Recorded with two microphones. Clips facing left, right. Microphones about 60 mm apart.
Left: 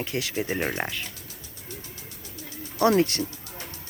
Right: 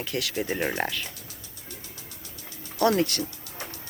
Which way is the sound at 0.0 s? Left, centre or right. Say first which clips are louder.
Left 1 dB; left.